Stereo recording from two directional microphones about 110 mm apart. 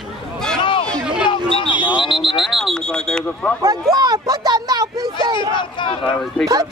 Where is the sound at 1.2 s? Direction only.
55° left (ahead or behind).